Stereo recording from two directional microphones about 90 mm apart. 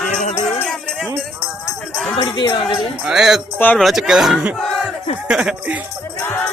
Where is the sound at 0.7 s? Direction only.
5° left (ahead or behind).